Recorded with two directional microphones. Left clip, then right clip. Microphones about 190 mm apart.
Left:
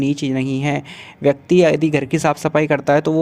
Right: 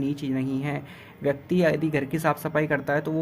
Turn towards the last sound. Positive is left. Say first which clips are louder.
# left 10 dB
turn(degrees=40)  # may be behind; listen again after turning